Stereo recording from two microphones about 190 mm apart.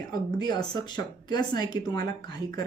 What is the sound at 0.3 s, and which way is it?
Speech, 20° left (ahead or behind).